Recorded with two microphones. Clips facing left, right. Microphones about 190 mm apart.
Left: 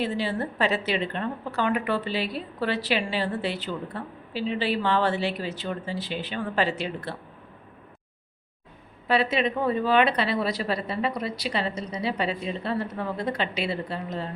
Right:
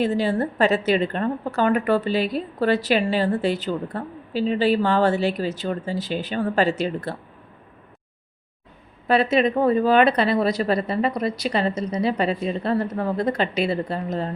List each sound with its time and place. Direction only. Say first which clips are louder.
0.0 s a woman's voice: right 6 dB; 45° right (ahead or behind)
9.0 s a woman's voice: right 5 dB; 45° right (ahead or behind)